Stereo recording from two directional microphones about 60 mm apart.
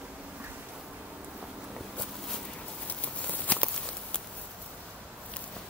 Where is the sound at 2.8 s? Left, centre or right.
Left.